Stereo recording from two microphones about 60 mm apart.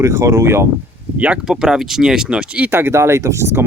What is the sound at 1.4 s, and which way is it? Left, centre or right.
Speech, centre.